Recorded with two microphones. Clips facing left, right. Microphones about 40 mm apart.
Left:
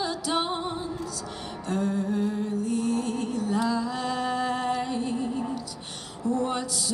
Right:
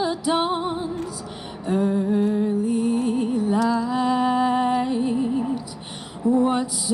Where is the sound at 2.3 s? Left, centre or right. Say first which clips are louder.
Right 6 dB; centre.